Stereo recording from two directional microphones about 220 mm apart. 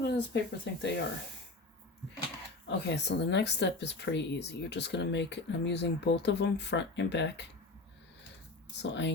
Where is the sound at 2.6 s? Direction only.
50° left (ahead or behind).